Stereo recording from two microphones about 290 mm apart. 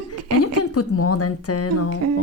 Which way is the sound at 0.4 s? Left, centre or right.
Left.